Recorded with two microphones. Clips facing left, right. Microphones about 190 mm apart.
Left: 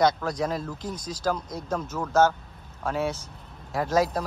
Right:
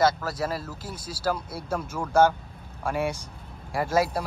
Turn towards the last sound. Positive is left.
turn(degrees=-10)  # may be behind; listen again after turning